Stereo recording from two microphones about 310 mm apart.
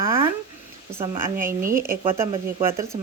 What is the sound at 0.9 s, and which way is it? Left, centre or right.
Speech, centre.